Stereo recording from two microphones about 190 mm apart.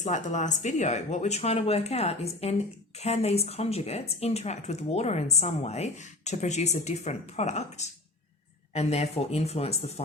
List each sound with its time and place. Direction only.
0.0 s speech: 40° left (ahead or behind)